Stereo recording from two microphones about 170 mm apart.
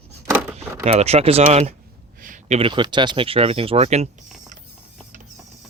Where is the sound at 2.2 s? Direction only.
50° right (ahead or behind).